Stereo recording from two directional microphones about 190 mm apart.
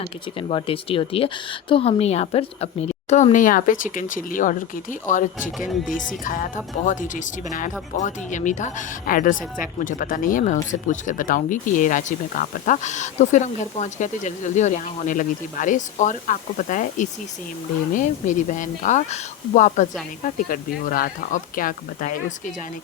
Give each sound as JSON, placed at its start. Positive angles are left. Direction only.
{"t": 0.0, "sound": "speech", "side_deg": 30}
{"t": 5.5, "sound": "speech", "side_deg": 0}
{"t": 5.9, "sound": "speech", "side_deg": 45}